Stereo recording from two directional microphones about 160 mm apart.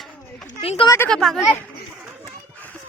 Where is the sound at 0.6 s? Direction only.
40° left (ahead or behind).